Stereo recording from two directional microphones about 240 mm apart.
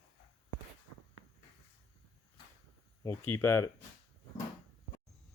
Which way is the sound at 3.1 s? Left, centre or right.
Centre.